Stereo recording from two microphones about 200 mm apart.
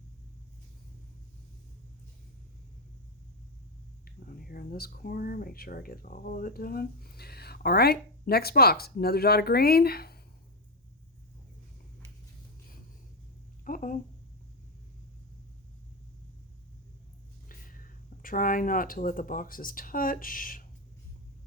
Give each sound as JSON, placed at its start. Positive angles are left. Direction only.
{"t": 4.0, "sound": "speech", "side_deg": 45}
{"t": 13.7, "sound": "a sound", "side_deg": 40}
{"t": 17.5, "sound": "speech", "side_deg": 45}